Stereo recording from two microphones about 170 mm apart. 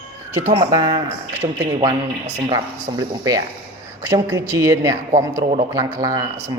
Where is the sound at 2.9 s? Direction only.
20° right (ahead or behind).